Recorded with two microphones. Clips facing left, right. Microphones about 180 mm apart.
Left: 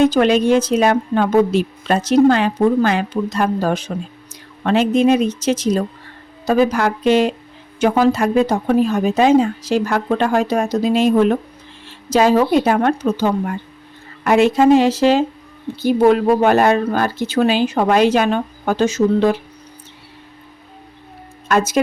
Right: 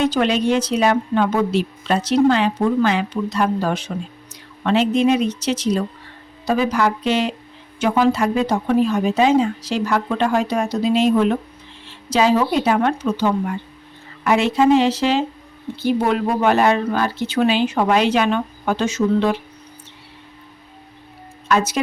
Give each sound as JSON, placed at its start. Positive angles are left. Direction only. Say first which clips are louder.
{"t": 0.0, "sound": "a woman's voice", "louder": "left 5 dB", "side_deg": 45}
{"t": 21.4, "sound": "speech", "louder": "left 2 dB", "side_deg": 45}